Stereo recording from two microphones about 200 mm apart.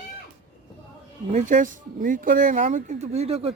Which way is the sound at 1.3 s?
40° right (ahead or behind).